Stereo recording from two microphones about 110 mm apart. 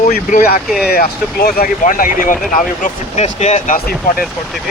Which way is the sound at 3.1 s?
85° left.